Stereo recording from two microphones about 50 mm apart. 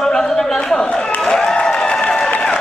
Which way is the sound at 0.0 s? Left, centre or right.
Centre.